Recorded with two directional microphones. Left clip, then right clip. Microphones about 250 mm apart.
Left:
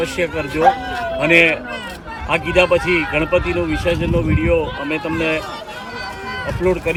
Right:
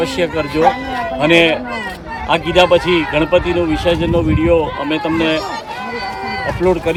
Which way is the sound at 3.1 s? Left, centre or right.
Centre.